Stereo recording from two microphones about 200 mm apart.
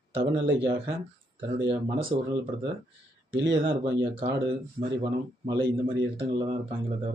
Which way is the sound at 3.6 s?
60° right (ahead or behind).